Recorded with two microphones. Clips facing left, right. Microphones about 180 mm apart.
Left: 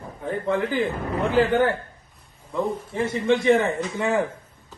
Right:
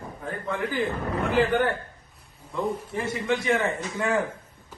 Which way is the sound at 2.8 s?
25° left (ahead or behind).